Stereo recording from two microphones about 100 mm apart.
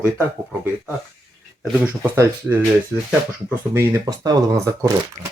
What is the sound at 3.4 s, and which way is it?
Speech, 20° right (ahead or behind).